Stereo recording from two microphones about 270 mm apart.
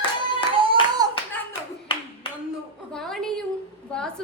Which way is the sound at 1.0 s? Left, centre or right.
Centre.